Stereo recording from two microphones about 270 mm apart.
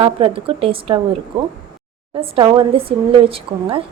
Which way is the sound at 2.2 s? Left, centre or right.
Centre.